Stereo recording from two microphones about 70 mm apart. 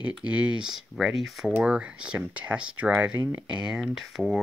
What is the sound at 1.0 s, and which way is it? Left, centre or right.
Speech, centre.